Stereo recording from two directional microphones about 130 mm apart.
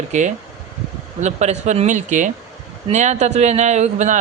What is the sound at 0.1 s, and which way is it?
A man's voice, 60° right (ahead or behind).